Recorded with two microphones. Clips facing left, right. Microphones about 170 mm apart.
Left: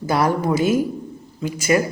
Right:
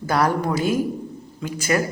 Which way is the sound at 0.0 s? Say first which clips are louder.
Left 1 dB; 10° left (ahead or behind).